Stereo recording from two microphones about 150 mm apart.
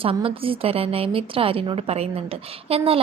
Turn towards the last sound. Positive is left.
turn(degrees=-40)  # may be behind; listen again after turning